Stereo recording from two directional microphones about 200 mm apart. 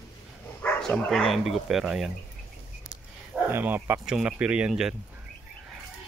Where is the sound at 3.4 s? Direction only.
10° right (ahead or behind).